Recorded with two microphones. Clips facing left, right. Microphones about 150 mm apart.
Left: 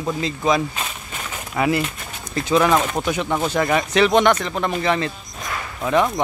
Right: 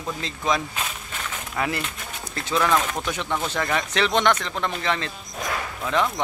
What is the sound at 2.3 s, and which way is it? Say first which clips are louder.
Speech: left 5 dB; 15° left (ahead or behind).